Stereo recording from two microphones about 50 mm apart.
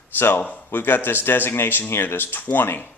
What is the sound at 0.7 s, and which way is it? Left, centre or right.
Speech, left.